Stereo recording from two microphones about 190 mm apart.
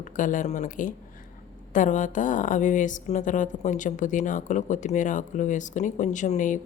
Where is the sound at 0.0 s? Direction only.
45° left (ahead or behind).